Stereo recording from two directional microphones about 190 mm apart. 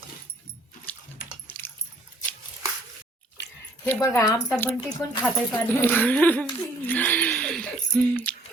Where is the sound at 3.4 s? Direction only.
65° left (ahead or behind).